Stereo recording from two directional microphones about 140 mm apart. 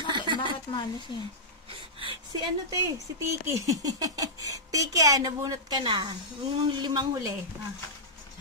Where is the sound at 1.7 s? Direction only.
40° right (ahead or behind).